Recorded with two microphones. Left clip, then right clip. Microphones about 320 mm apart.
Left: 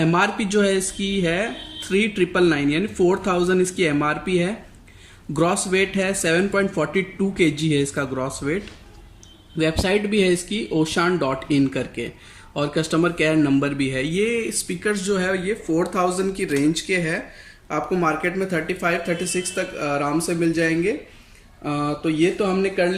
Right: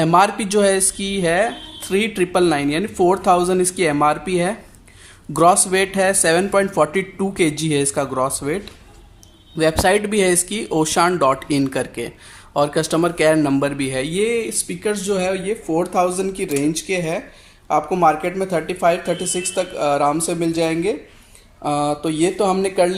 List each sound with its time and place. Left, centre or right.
0.0 s speech: centre